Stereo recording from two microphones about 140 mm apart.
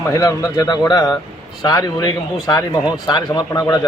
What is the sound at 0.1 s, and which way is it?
Speech, 25° left (ahead or behind).